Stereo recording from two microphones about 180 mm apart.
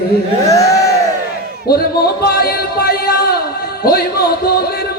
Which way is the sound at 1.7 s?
60° left (ahead or behind).